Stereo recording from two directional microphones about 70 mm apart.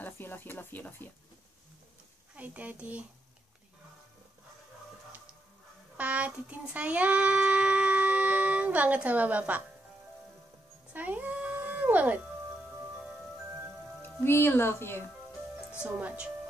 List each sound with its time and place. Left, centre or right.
0.0 s speech: left
2.3 s speech: right
5.9 s child singing: right
10.9 s a sound: right
14.0 s speech: left
15.9 s speech: right